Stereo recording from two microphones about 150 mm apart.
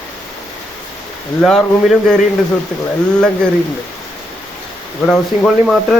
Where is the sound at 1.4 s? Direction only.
5° left (ahead or behind).